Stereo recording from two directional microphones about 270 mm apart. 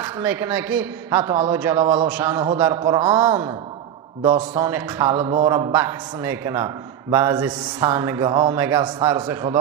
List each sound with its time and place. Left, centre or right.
0.0 s a man's voice: centre